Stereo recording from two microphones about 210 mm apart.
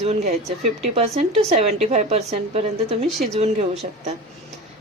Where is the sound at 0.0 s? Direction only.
30° right (ahead or behind).